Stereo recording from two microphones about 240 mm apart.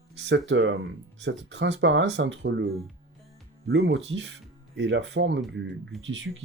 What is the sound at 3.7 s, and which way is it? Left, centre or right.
Speech, right.